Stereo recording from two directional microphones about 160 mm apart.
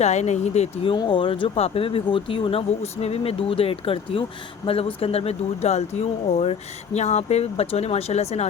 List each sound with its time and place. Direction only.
0.0 s speech: 45° left (ahead or behind)
0.9 s speech: 30° left (ahead or behind)